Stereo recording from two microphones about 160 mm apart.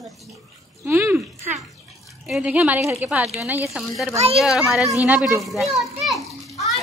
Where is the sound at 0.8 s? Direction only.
15° right (ahead or behind).